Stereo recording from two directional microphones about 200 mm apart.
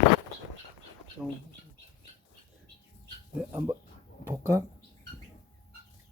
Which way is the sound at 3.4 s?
10° right (ahead or behind).